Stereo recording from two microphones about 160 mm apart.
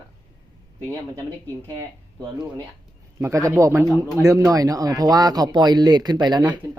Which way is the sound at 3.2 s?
20° right (ahead or behind).